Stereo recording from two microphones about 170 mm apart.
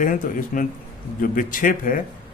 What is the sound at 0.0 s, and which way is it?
Speech, 50° left (ahead or behind).